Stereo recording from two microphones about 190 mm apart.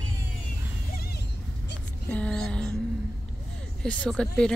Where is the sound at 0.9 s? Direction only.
55° left (ahead or behind).